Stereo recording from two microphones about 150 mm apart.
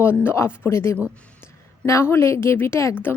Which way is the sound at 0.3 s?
15° left (ahead or behind).